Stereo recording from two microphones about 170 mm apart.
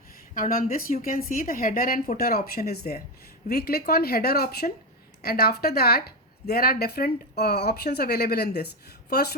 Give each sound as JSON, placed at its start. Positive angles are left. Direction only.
{"t": 0.3, "sound": "a woman's voice", "side_deg": 55}